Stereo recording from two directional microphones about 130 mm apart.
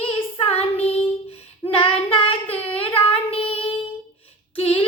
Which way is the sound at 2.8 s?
45° left (ahead or behind).